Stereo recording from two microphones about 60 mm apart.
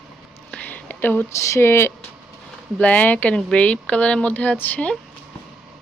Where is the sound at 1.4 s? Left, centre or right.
Left.